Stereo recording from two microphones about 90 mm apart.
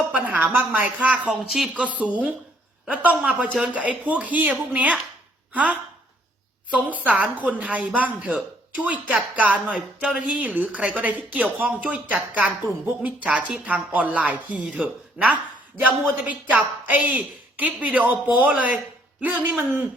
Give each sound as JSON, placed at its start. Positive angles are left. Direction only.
{"t": 0.1, "sound": "speech", "side_deg": -20}
{"t": 1.5, "sound": "speech", "side_deg": 0}
{"t": 2.0, "sound": "speech", "side_deg": -15}
{"t": 6.7, "sound": "speech", "side_deg": -15}